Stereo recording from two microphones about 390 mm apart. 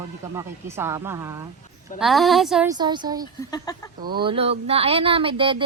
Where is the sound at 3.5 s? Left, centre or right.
Centre.